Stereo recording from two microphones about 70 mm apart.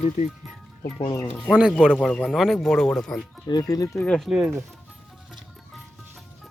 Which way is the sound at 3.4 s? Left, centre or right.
Left.